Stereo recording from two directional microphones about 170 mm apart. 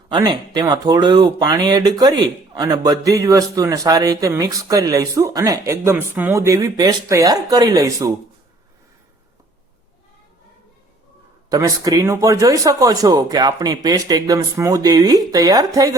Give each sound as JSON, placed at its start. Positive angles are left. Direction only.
{"t": 0.1, "sound": "speech", "side_deg": -25}
{"t": 11.4, "sound": "speech", "side_deg": -20}